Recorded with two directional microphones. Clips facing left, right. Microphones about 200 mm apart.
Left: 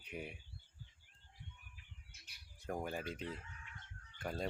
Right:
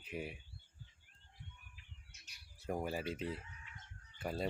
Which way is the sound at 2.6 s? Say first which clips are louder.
Right 2 dB; 5° right (ahead or behind).